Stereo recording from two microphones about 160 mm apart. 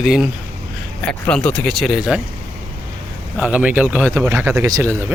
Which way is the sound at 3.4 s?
10° right (ahead or behind).